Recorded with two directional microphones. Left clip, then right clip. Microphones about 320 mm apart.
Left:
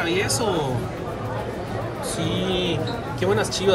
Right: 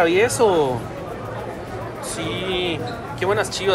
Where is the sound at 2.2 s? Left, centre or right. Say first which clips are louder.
Right 1 dB; centre.